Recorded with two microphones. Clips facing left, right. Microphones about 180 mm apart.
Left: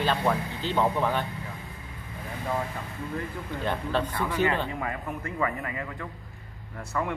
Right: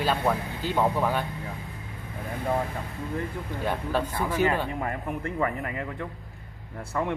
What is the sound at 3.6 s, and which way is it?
Speech, 10° right (ahead or behind).